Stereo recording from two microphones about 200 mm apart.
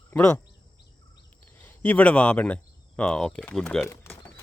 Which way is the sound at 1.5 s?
10° left (ahead or behind).